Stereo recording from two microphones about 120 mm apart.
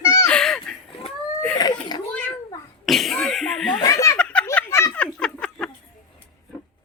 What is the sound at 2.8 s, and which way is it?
Cough, centre (ahead or behind).